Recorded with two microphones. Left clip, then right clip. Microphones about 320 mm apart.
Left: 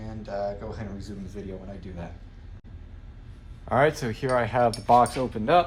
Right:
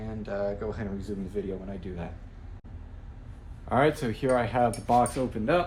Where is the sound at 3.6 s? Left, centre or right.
Left.